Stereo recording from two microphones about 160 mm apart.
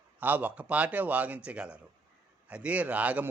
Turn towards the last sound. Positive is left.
turn(degrees=-10)  # may be behind; listen again after turning